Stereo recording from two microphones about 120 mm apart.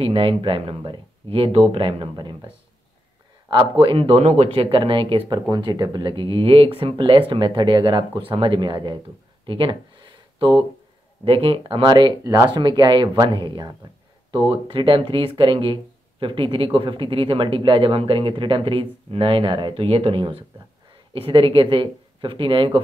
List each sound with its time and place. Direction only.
0.0 s speech: 50° right (ahead or behind)
9.5 s a sound: 45° right (ahead or behind)
11.2 s speech: 50° right (ahead or behind)